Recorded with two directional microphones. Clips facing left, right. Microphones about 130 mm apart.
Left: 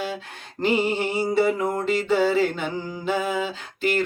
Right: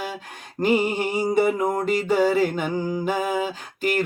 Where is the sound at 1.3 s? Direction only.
50° right (ahead or behind).